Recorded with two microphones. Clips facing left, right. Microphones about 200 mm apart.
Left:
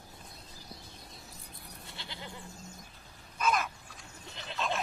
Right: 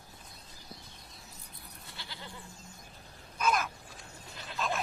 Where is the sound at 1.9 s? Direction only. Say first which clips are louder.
Left 2 dB; 20° left (ahead or behind).